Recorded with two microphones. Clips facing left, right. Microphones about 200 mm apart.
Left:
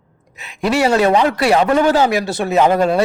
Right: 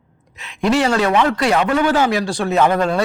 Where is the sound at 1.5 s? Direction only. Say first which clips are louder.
Left 6 dB; 35° left (ahead or behind).